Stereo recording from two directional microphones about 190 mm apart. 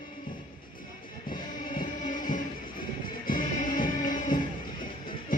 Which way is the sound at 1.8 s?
45° left (ahead or behind).